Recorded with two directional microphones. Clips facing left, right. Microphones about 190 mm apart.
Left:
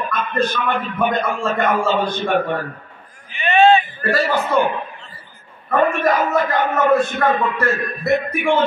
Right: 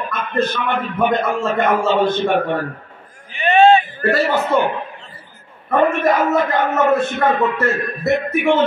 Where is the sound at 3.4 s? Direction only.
40° right (ahead or behind).